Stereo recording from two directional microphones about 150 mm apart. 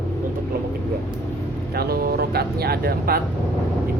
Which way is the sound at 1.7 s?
90° right.